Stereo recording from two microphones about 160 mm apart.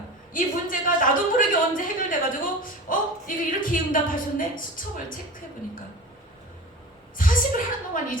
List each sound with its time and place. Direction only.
0.3 s a woman's voice: 60° left (ahead or behind)
7.2 s a woman's voice: 55° left (ahead or behind)